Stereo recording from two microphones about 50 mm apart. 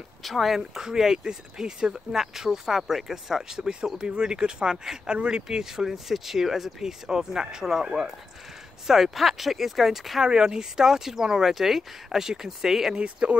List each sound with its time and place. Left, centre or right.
0.2 s speech: centre
0.6 s speech: centre
10.2 s speech: centre
12.9 s speech: right